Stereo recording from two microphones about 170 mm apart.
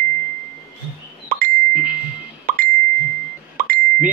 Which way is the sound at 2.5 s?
60° right (ahead or behind).